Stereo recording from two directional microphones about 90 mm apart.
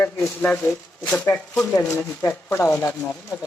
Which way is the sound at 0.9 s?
15° left (ahead or behind).